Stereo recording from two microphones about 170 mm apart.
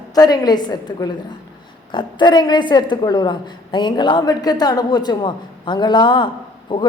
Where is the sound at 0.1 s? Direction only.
20° left (ahead or behind).